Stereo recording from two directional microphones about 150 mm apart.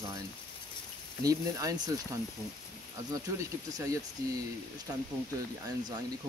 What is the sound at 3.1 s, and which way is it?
Speech, 20° right (ahead or behind).